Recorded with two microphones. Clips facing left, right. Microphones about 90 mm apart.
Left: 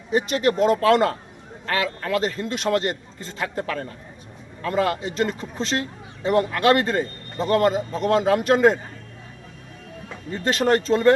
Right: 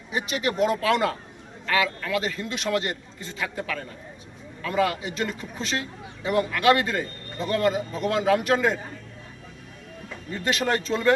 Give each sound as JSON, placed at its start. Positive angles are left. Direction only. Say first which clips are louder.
{"t": 0.1, "sound": "speech", "louder": "left 6 dB", "side_deg": 40}
{"t": 10.3, "sound": "speech", "louder": "left 5 dB", "side_deg": 35}